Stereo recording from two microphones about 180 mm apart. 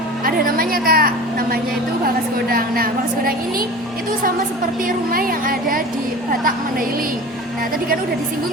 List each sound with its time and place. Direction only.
0.3 s a woman's voice: 55° right (ahead or behind)
4.9 s speech: 50° right (ahead or behind)